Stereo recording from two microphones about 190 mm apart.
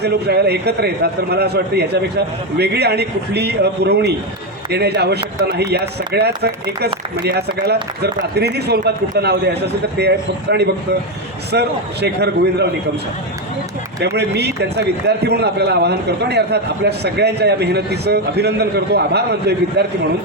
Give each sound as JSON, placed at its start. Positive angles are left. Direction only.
{"t": 0.0, "sound": "a man's voice", "side_deg": -60}
{"t": 14.2, "sound": "a man's voice", "side_deg": -60}